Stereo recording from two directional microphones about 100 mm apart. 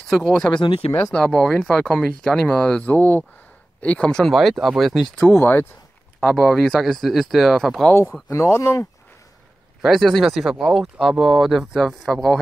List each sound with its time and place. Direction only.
0.1 s speech: 5° left (ahead or behind)
0.6 s speech: 55° left (ahead or behind)
1.1 s speech: 5° left (ahead or behind)
5.3 s speech: 20° left (ahead or behind)
6.2 s speech: 5° left (ahead or behind)
8.3 s speech: 30° left (ahead or behind)
9.8 s speech: centre (ahead or behind)